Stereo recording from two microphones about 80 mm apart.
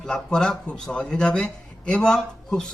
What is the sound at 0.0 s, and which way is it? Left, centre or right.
A man's voice, centre.